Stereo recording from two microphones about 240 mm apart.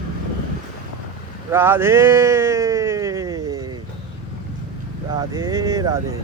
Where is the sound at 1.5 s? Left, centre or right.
Centre.